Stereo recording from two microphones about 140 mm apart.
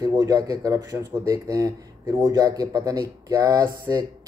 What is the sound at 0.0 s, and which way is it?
Speech, 25° right (ahead or behind).